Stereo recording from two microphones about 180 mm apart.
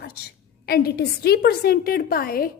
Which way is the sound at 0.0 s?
60° left (ahead or behind).